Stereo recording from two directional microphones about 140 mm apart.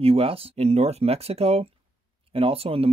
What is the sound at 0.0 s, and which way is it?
Speech, 45° right (ahead or behind).